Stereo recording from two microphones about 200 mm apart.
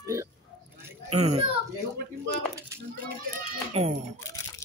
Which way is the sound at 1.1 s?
30° right (ahead or behind).